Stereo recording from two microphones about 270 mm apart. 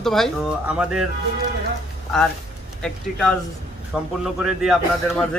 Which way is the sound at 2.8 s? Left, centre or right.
Centre.